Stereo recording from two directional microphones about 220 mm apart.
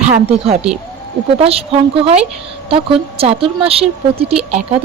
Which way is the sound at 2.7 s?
25° right (ahead or behind).